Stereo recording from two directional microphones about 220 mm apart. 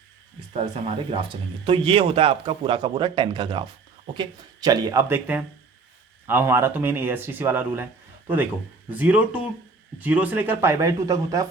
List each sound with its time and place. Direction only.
0.5 s speech: 30° right (ahead or behind); by 7.9 s 10° right (ahead or behind)
8.9 s speech: 5° right (ahead or behind)